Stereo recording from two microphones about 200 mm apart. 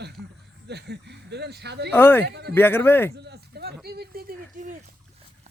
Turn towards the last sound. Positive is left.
turn(degrees=-45)  # may be behind; listen again after turning